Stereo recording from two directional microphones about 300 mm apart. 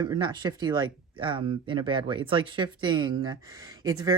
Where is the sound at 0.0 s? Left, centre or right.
Centre.